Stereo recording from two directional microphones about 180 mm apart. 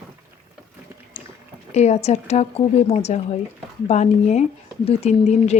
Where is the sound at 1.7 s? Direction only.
35° left (ahead or behind).